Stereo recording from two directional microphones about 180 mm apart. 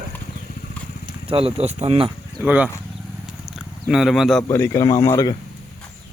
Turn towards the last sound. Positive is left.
turn(degrees=20)  # may be behind; listen again after turning